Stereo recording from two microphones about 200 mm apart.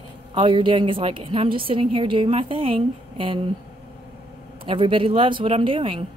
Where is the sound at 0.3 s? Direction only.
25° right (ahead or behind).